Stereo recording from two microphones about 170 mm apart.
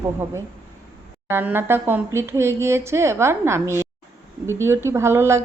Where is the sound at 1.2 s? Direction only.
10° right (ahead or behind).